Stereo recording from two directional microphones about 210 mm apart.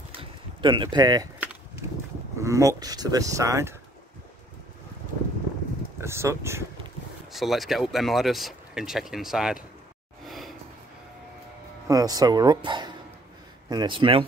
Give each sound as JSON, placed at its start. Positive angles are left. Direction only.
{"t": 0.1, "sound": "a sound", "side_deg": -25}
{"t": 2.3, "sound": "speech", "side_deg": -15}
{"t": 5.9, "sound": "speech", "side_deg": -10}
{"t": 7.3, "sound": "speech", "side_deg": 0}
{"t": 10.2, "sound": "gasp", "side_deg": 0}
{"t": 11.9, "sound": "speech", "side_deg": -15}